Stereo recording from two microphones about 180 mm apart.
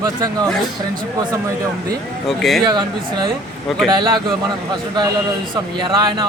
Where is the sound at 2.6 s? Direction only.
25° right (ahead or behind).